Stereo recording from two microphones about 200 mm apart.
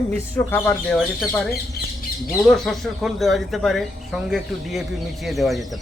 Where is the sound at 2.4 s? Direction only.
Centre (ahead or behind).